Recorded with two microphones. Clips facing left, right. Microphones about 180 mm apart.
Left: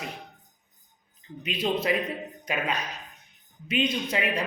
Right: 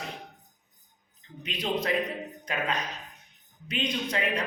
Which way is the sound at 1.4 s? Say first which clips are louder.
Left 3 dB; 5° left (ahead or behind).